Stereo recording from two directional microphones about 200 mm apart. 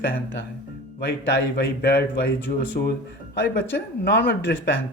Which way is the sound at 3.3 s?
55° left (ahead or behind).